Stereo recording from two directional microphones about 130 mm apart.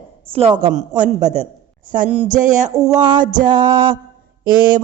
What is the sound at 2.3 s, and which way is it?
Music, 70° right (ahead or behind).